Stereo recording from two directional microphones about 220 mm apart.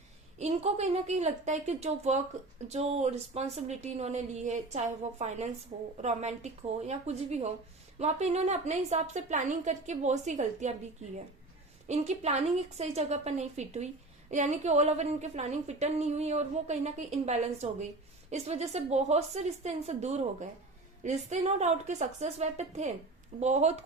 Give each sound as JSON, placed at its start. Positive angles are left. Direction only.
{"t": 0.3, "sound": "a woman's voice", "side_deg": -30}
{"t": 11.9, "sound": "a woman's voice", "side_deg": -30}